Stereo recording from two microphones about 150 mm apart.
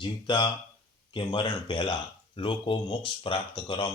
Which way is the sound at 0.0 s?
30° left (ahead or behind).